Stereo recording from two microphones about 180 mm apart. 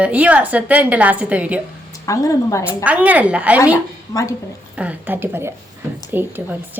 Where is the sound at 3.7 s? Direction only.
20° left (ahead or behind).